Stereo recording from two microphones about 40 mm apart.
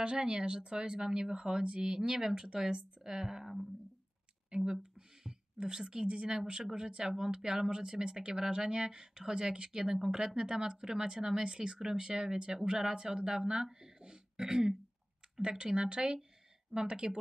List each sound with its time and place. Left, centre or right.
0.0 s a woman's voice: right